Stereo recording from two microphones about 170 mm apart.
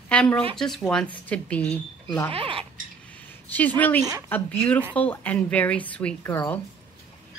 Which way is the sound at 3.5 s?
10° left (ahead or behind).